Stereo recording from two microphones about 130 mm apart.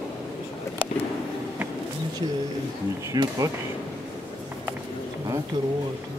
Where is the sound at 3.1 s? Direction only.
30° right (ahead or behind).